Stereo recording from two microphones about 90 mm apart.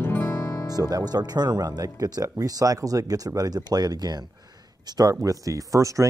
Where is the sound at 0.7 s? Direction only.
45° right (ahead or behind).